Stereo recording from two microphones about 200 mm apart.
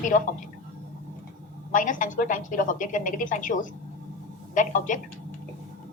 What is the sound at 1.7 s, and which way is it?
A woman's voice, 40° left (ahead or behind).